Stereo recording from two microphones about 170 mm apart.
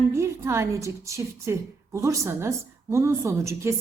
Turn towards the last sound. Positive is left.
turn(degrees=-15)  # may be behind; listen again after turning